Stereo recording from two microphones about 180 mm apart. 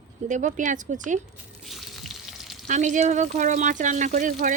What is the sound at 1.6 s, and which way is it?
Water, centre (ahead or behind).